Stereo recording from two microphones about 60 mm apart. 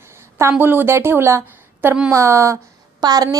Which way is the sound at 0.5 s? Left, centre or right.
Right.